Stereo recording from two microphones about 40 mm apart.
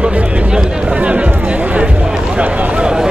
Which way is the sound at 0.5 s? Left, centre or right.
Centre.